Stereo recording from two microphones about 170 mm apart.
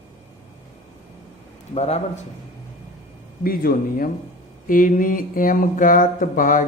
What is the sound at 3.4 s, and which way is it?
Speech, 60° left (ahead or behind).